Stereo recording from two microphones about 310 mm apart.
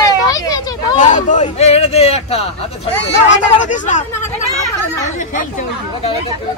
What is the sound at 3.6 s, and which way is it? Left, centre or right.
Speech, left.